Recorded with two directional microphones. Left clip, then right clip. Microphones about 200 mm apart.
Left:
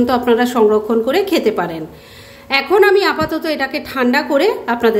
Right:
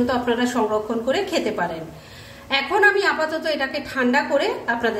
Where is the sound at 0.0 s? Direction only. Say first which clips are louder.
Left 7 dB; 40° left (ahead or behind).